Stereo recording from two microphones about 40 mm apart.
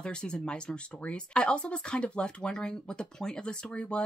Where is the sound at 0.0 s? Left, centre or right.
Left.